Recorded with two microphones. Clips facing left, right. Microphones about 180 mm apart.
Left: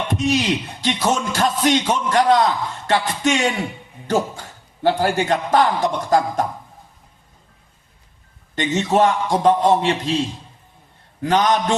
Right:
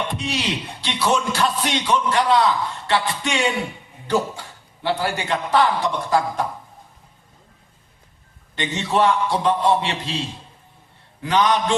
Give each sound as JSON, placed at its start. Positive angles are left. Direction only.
{"t": 0.1, "sound": "speech", "side_deg": 45}
{"t": 4.8, "sound": "speech", "side_deg": 45}
{"t": 8.5, "sound": "speech", "side_deg": 45}
{"t": 11.2, "sound": "speech", "side_deg": 45}